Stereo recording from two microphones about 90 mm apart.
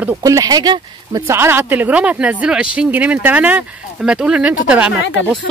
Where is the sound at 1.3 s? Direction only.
25° right (ahead or behind).